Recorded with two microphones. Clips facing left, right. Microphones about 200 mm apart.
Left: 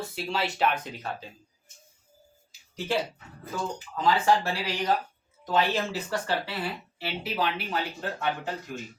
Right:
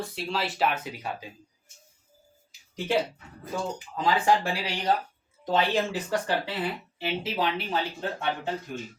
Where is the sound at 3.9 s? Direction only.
15° right (ahead or behind).